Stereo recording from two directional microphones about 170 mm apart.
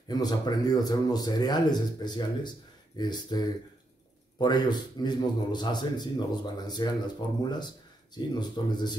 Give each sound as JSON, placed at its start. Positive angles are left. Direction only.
{"t": 0.1, "sound": "a man's voice", "side_deg": 25}